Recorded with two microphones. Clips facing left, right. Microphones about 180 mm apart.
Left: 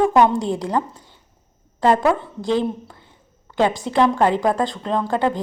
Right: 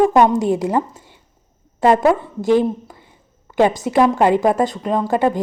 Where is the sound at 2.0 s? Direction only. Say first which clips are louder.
Right 4 dB; 10° right (ahead or behind).